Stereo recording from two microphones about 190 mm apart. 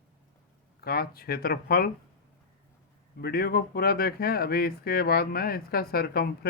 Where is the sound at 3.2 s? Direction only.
55° left (ahead or behind).